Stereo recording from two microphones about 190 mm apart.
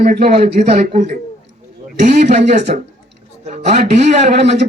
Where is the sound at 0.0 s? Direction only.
55° right (ahead or behind).